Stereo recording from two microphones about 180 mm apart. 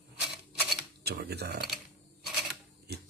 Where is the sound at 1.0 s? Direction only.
65° right (ahead or behind).